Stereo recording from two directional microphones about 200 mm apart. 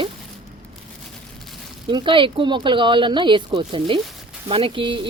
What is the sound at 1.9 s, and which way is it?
Speech, 25° right (ahead or behind).